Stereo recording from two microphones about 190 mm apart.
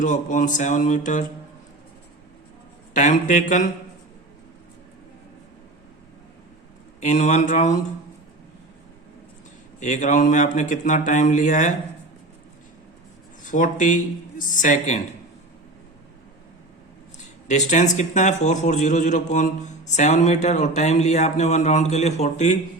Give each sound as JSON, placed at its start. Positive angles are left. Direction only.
{"t": 0.0, "sound": "a man's voice", "side_deg": 40}
{"t": 2.9, "sound": "a man's voice", "side_deg": 40}
{"t": 7.0, "sound": "a man's voice", "side_deg": 40}
{"t": 9.8, "sound": "a man's voice", "side_deg": 40}
{"t": 13.4, "sound": "speech", "side_deg": 45}
{"t": 17.5, "sound": "a man's voice", "side_deg": 40}